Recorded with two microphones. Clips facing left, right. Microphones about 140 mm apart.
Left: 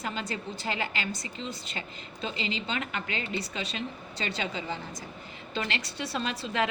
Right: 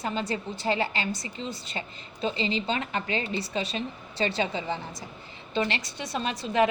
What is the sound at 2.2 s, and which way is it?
A woman's voice, 30° right (ahead or behind).